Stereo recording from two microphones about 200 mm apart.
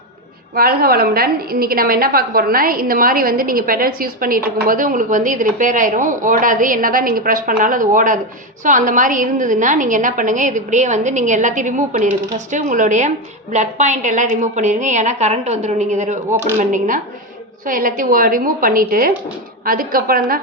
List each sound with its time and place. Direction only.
0.5 s a woman's voice: 50° right (ahead or behind)